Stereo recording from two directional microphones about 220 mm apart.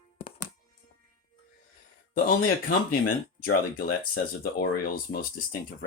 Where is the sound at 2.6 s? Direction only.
40° left (ahead or behind).